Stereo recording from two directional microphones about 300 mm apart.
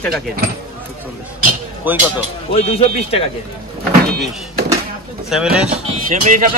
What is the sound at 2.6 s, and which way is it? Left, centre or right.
Speech, left.